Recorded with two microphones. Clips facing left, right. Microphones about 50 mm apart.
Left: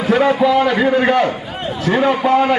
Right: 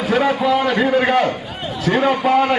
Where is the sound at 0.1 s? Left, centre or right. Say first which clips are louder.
Left 4 dB; centre.